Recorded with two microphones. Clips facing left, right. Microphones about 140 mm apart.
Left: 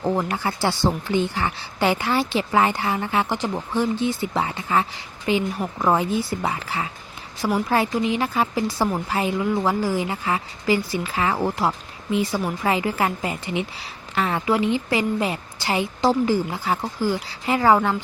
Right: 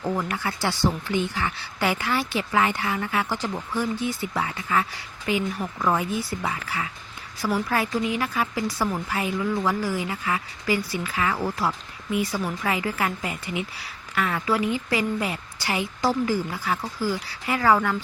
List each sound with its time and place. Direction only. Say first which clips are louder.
0.0 s a woman's voice: left 4 dB; 25° left (ahead or behind)